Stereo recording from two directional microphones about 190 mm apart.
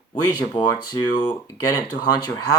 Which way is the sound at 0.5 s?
25° left (ahead or behind).